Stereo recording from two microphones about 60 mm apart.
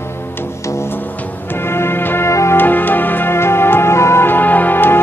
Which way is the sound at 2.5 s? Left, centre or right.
Left.